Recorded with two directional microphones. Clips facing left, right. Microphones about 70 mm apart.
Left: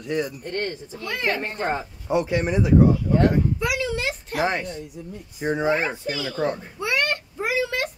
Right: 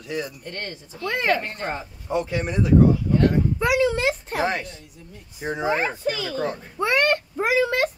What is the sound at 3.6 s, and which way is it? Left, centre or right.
Speech, right.